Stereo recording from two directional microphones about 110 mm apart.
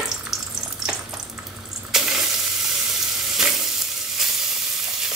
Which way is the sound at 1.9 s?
5° right (ahead or behind).